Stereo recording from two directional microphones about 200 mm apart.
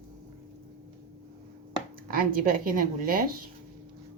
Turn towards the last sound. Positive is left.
turn(degrees=-45)  # may be behind; listen again after turning